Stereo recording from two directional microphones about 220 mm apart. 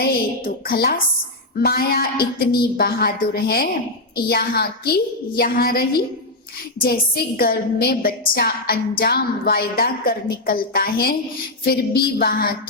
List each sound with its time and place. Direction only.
0.0 s a woman's voice: 45° left (ahead or behind)